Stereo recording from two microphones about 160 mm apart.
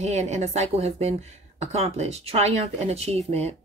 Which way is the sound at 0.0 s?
45° right (ahead or behind).